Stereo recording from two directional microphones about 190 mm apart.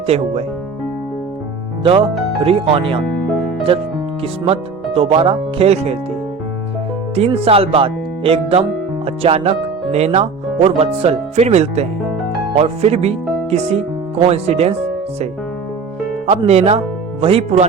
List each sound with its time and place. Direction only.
0.1 s speech: 35° right (ahead or behind)
2.4 s speech: 30° right (ahead or behind)
4.2 s speech: 30° right (ahead or behind)
7.2 s speech: 30° right (ahead or behind)
16.2 s speech: 35° right (ahead or behind)